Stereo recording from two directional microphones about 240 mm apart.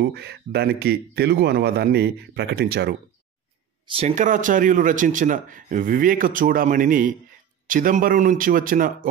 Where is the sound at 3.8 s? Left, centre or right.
Right.